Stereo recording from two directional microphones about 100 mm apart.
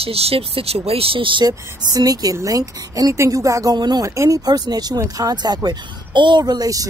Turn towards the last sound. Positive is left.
turn(degrees=-40)  # may be behind; listen again after turning